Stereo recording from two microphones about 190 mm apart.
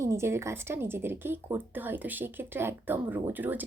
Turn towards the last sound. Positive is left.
turn(degrees=-10)  # may be behind; listen again after turning